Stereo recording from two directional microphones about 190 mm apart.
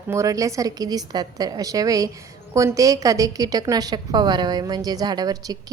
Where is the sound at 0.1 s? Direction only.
15° right (ahead or behind).